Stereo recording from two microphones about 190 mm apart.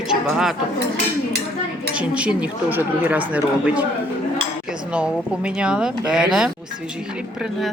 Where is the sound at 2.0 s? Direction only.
5° right (ahead or behind).